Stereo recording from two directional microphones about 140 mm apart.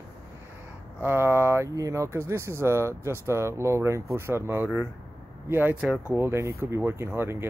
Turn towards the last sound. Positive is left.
turn(degrees=-15)  # may be behind; listen again after turning